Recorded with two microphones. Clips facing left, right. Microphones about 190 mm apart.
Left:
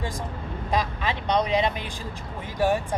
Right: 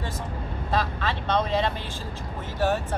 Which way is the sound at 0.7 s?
15° left (ahead or behind).